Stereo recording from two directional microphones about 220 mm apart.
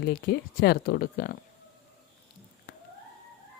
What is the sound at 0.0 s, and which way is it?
A woman's voice, 45° left (ahead or behind).